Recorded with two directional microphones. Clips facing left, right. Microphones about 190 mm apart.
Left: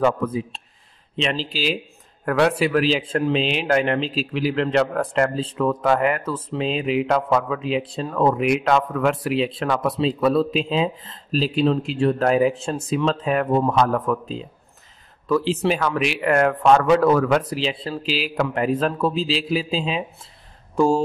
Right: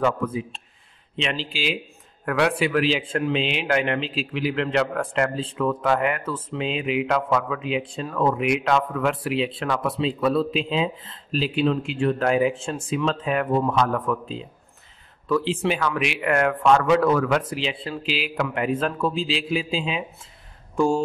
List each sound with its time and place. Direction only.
0.0 s speech: 40° left (ahead or behind)